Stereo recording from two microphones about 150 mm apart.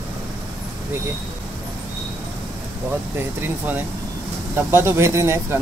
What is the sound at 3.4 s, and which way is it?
Speech, 10° right (ahead or behind).